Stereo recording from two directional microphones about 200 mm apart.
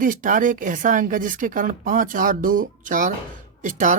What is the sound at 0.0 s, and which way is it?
Speech, 40° right (ahead or behind).